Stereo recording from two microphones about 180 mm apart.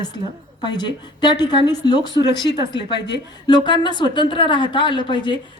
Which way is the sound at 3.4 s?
25° left (ahead or behind).